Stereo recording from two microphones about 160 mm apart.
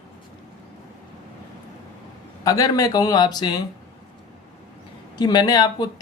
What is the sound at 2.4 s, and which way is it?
Speech, 20° left (ahead or behind).